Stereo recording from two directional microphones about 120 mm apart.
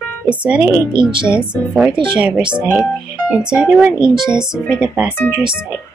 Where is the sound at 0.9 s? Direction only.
40° right (ahead or behind).